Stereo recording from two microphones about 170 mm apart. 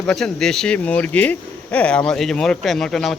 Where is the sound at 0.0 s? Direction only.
5° left (ahead or behind).